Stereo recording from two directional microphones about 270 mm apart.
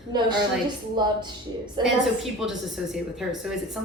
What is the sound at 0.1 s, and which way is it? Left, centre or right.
A woman's voice, centre.